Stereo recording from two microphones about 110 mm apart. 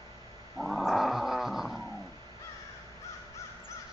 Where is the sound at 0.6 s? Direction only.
Centre (ahead or behind).